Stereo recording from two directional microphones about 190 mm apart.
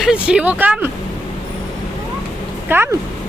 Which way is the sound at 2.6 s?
10° right (ahead or behind).